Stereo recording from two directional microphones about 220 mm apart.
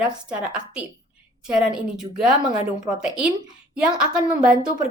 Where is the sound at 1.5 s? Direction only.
5° right (ahead or behind).